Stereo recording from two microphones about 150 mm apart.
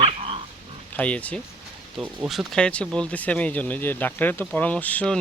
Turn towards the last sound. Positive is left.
turn(degrees=10)  # may be behind; listen again after turning